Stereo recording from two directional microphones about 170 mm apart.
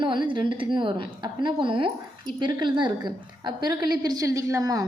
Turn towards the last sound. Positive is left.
turn(degrees=-20)  # may be behind; listen again after turning